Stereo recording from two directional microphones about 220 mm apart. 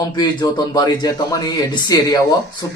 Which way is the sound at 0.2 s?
20° left (ahead or behind).